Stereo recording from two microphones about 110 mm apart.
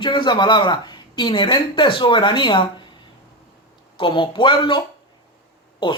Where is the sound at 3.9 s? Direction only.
50° left (ahead or behind).